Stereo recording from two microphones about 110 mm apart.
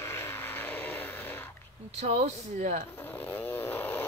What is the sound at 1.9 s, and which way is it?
Speech, 90° right.